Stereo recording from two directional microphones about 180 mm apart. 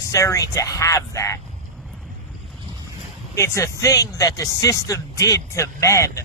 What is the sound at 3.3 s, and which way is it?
A man's voice, 15° left (ahead or behind).